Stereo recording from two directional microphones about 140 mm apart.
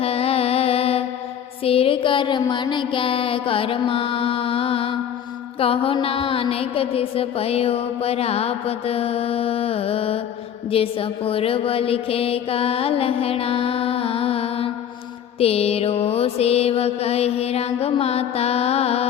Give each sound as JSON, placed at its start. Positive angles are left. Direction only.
{"t": 0.0, "sound": "music", "side_deg": 45}
{"t": 5.5, "sound": "mantra", "side_deg": 40}